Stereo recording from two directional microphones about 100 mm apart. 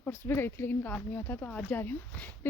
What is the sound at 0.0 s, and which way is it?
A woman's voice, 20° left (ahead or behind).